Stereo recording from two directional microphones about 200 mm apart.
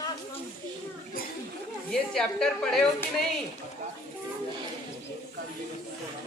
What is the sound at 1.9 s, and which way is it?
A woman's voice, 5° left (ahead or behind).